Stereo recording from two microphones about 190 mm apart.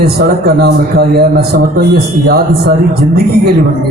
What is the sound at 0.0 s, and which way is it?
Speech, 55° right (ahead or behind).